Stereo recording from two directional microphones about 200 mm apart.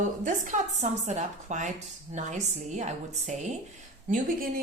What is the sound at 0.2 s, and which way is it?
A woman's voice, 40° right (ahead or behind).